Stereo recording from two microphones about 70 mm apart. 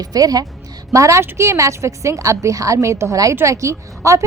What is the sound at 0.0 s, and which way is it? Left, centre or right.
Speech, right.